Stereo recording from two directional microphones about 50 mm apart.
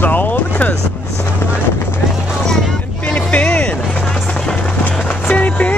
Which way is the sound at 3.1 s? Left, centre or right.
Left.